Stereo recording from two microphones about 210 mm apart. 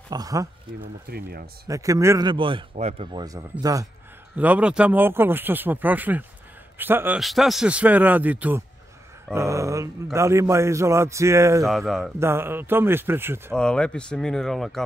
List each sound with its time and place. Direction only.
0.1 s speech: 15° right (ahead or behind)
0.7 s speech: 50° right (ahead or behind)
1.7 s speech: 15° right (ahead or behind)
4.4 s speech: 5° right (ahead or behind)
11.6 s speech: centre (ahead or behind)
12.2 s speech: 10° right (ahead or behind)
13.6 s speech: 5° left (ahead or behind)